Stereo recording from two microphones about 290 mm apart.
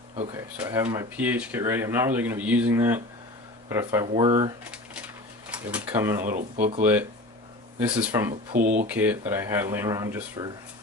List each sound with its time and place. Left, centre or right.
0.2 s speech: centre
0.5 s speech: centre
8.5 s speech: right
8.9 s speech: centre